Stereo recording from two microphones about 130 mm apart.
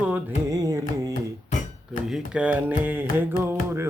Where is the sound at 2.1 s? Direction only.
10° right (ahead or behind).